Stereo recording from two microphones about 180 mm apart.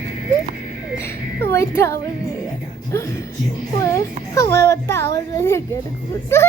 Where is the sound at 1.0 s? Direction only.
15° left (ahead or behind).